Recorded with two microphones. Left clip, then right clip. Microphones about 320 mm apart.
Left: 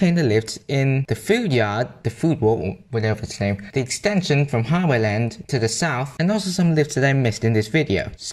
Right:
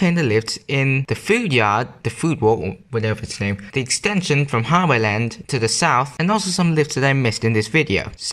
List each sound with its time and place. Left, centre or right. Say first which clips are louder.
0.0 s speech: right 1 dB; centre